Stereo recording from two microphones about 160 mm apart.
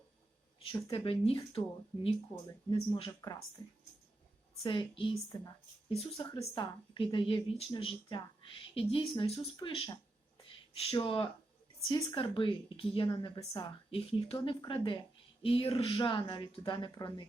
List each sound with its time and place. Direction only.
0.9 s a woman's voice: 35° left (ahead or behind)
3.1 s a woman's voice: 20° left (ahead or behind)
4.6 s a woman's voice: 30° left (ahead or behind)
6.1 s a woman's voice: 20° left (ahead or behind)